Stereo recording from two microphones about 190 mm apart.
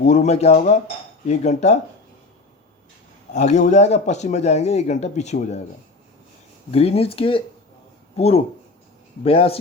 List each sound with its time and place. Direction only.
0.0 s speech: 35° left (ahead or behind)
3.3 s speech: 35° left (ahead or behind)
6.7 s a man's voice: 30° left (ahead or behind)